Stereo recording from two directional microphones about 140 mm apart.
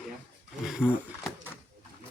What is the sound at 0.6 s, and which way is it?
Speech, 5° right (ahead or behind).